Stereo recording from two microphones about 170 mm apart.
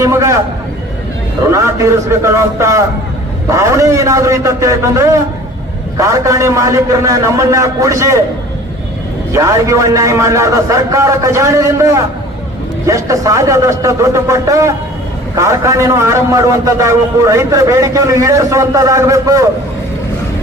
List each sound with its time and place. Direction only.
0.0 s a man's voice: 15° right (ahead or behind)
1.5 s a man's voice: 15° right (ahead or behind)
9.3 s a man's voice: 20° right (ahead or behind)